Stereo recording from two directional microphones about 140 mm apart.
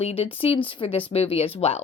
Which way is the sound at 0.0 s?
45° left (ahead or behind).